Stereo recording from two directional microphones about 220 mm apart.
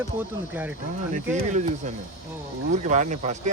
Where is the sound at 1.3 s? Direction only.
30° right (ahead or behind).